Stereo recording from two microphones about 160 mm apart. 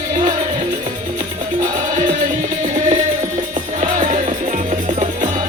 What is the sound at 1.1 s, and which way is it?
Music, 55° right (ahead or behind).